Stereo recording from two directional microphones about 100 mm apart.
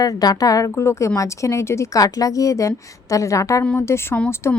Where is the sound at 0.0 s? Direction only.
40° left (ahead or behind).